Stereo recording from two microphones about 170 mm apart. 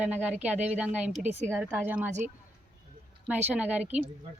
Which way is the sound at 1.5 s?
5° left (ahead or behind).